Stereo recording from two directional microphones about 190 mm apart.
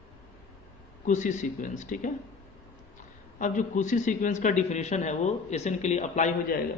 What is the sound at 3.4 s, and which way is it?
A man's voice, 40° left (ahead or behind).